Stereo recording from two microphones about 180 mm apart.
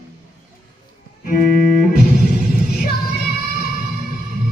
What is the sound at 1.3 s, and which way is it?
Music, 50° left (ahead or behind).